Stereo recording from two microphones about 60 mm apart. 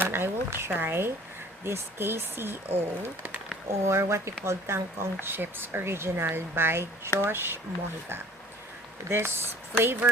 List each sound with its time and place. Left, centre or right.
0.0 s speech: right
9.0 s speech: right